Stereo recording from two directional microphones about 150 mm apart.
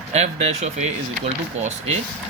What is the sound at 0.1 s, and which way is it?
Speech, 45° right (ahead or behind).